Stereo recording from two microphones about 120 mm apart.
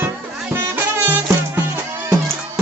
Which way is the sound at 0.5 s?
15° right (ahead or behind).